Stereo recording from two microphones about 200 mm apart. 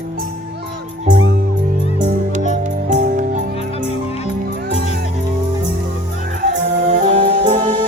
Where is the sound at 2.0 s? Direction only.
40° right (ahead or behind).